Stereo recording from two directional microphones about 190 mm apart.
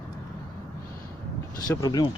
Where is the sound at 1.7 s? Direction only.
20° left (ahead or behind).